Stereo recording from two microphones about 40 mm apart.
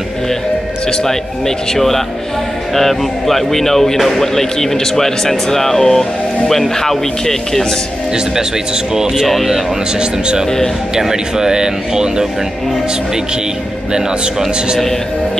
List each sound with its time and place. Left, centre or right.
1.8 s speech: centre
8.9 s speech: centre
9.3 s speech: centre
9.9 s speech: right